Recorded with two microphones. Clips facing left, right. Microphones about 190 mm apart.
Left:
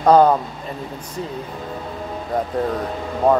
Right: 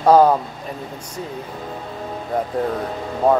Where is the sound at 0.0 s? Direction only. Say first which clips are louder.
Even; 5° right (ahead or behind).